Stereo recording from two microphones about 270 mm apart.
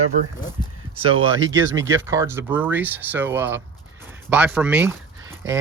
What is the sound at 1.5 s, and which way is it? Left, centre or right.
Speech, centre.